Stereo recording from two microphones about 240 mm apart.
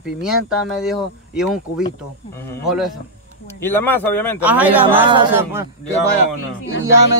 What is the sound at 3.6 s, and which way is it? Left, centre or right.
Speech, centre.